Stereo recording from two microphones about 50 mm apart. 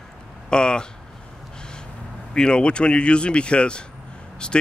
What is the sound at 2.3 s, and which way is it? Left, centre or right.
Speech, centre.